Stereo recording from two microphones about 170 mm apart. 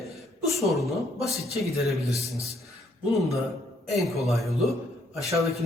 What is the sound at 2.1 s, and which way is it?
Speech, 20° left (ahead or behind).